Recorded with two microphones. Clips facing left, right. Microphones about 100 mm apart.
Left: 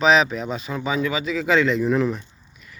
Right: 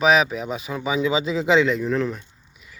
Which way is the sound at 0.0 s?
5° right (ahead or behind).